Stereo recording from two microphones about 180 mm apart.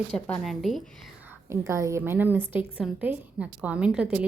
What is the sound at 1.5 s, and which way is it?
A woman's voice, 15° right (ahead or behind).